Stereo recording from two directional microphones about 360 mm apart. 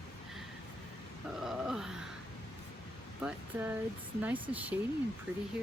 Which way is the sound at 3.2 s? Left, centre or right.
Centre.